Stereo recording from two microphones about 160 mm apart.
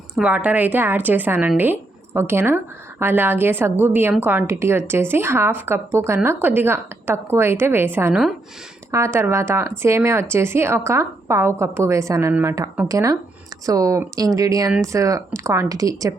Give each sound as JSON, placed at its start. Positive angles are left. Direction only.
{"t": 0.2, "sound": "a woman's voice", "side_deg": -10}